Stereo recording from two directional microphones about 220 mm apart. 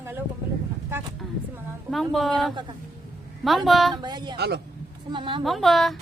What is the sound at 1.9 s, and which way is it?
Speech, centre (ahead or behind).